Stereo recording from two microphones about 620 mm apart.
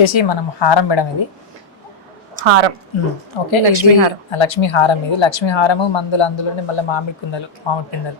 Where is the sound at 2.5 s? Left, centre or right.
Right.